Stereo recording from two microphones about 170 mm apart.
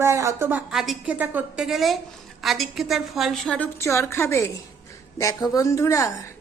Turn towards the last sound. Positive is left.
turn(degrees=15)  # may be behind; listen again after turning